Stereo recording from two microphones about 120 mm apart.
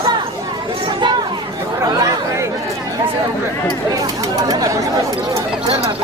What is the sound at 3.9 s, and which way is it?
Chatter, 30° right (ahead or behind).